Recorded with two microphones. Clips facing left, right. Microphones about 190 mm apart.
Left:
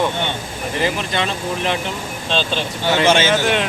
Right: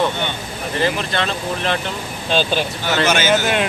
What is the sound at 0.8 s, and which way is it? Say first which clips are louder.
Speech: right 1 dB; 15° left (ahead or behind).